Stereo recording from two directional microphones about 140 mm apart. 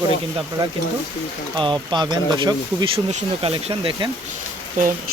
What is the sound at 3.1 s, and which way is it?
Speech, 40° right (ahead or behind).